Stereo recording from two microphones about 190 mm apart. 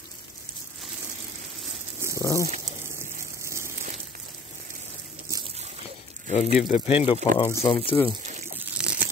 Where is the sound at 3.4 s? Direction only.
15° right (ahead or behind).